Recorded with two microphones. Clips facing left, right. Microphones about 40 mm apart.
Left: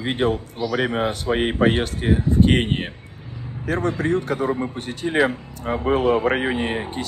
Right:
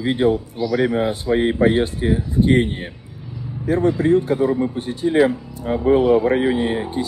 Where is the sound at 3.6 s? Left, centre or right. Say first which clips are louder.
Right 5 dB; left.